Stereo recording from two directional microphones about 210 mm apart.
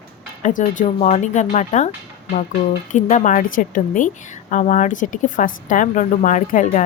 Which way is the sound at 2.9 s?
35° left (ahead or behind).